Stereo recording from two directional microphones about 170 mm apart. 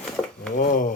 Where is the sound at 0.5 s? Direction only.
50° left (ahead or behind).